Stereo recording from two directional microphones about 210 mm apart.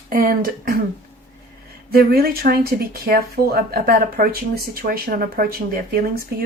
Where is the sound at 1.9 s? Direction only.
45° right (ahead or behind).